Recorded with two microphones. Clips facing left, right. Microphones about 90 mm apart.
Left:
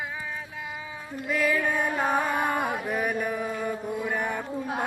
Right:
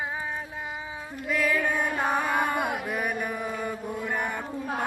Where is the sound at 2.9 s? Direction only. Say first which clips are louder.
Left 2 dB; centre (ahead or behind).